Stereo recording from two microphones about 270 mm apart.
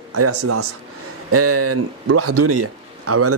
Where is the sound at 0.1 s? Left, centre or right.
Right.